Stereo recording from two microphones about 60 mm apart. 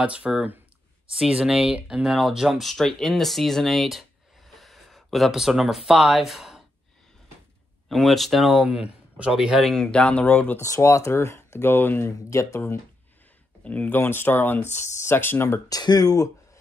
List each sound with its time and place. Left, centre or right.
0.0 s speech: centre
7.9 s speech: centre
8.6 s a man's voice: centre
9.6 s speech: centre
9.8 s speech: centre
10.6 s speech: left
11.7 s speech: left
12.0 s speech: left
13.7 s speech: left
13.9 s speech: left
15.7 s speech: left